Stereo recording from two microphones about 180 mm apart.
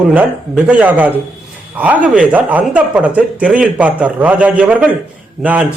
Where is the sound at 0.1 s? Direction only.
5° right (ahead or behind).